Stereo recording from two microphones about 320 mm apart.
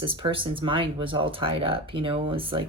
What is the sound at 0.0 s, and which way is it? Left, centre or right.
Speech, centre.